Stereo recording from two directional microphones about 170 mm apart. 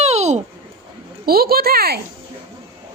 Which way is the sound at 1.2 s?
60° right (ahead or behind).